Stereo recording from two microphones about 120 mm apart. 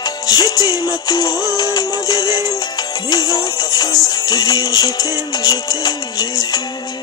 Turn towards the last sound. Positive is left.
turn(degrees=35)  # may be behind; listen again after turning